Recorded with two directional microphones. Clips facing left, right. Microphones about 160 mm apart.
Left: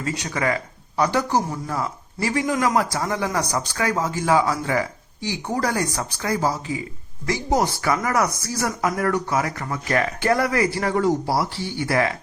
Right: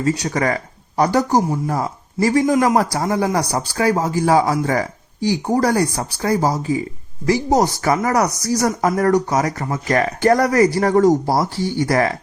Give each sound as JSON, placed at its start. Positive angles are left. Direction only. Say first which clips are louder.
{"t": 0.0, "sound": "speech", "louder": "right 6 dB", "side_deg": -40}